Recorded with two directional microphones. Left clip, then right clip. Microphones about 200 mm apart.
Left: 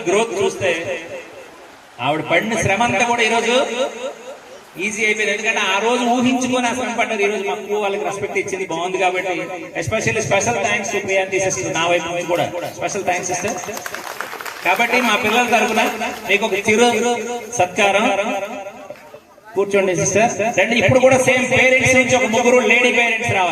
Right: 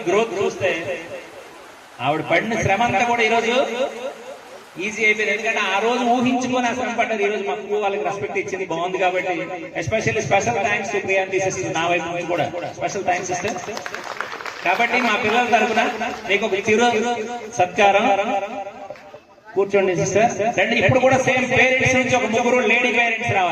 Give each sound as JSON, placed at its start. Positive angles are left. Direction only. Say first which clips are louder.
{"t": 0.1, "sound": "a man's voice", "louder": "left 2 dB", "side_deg": 35}
{"t": 2.0, "sound": "a man's voice", "louder": "left 2 dB", "side_deg": 35}
{"t": 14.6, "sound": "a man's voice", "louder": "left 2 dB", "side_deg": 35}
{"t": 19.5, "sound": "a man's voice", "louder": "left 1 dB", "side_deg": 35}